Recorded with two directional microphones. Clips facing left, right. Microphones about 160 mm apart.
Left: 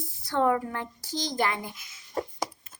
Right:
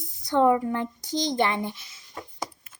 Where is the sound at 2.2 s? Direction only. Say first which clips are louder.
Left 9 dB; 40° left (ahead or behind).